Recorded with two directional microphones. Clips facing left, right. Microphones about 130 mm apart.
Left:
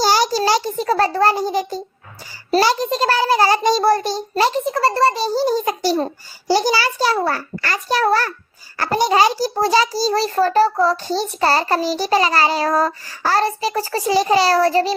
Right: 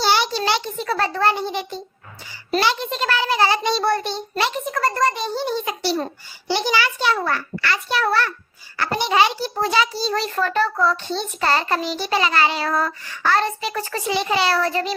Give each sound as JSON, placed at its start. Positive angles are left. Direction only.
{"t": 0.0, "sound": "a child's voice", "side_deg": 40}